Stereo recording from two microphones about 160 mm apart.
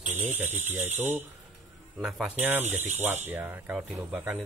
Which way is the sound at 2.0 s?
Centre (ahead or behind).